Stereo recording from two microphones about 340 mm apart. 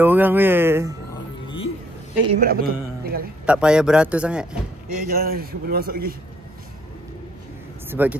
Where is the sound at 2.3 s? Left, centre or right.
Right.